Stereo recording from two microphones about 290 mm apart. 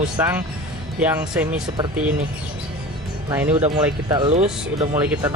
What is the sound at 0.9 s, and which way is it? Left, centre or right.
Speech, centre.